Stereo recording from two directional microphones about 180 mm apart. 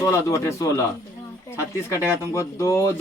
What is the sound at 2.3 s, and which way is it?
Speech, 15° left (ahead or behind).